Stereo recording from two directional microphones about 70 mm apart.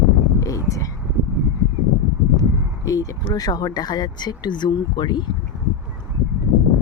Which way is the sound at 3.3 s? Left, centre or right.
Left.